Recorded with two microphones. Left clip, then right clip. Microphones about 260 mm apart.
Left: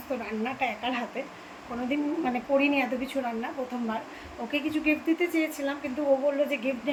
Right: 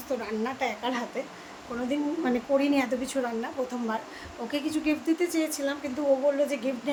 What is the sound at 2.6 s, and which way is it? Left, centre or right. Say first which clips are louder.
Speech: even; centre.